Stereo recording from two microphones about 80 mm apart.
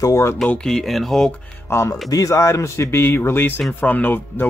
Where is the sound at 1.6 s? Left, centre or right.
Left.